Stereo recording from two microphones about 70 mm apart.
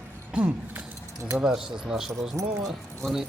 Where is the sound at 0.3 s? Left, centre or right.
Centre.